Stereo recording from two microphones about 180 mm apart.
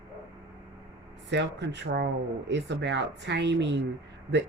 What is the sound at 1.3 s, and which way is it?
Speech, 75° right (ahead or behind).